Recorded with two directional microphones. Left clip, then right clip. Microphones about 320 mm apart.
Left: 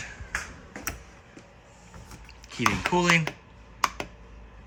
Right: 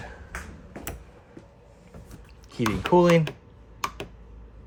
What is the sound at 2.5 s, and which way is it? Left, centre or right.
Chopping, centre.